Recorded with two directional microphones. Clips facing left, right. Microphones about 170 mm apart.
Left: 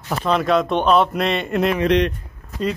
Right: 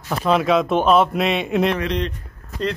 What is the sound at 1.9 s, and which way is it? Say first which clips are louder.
Speech: left 7 dB; 70° left (ahead or behind).